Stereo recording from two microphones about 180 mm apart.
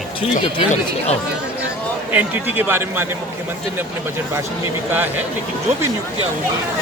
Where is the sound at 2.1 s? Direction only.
10° right (ahead or behind).